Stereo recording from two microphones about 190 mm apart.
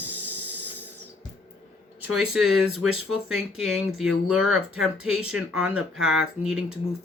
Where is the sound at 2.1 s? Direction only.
Centre (ahead or behind).